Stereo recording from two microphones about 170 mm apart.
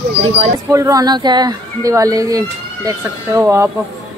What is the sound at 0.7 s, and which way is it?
Speech, 20° right (ahead or behind).